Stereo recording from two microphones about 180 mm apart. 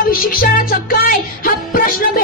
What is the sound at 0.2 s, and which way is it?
Music, 50° left (ahead or behind).